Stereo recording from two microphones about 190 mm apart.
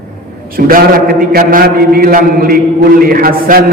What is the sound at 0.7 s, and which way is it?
Mantra, 50° right (ahead or behind).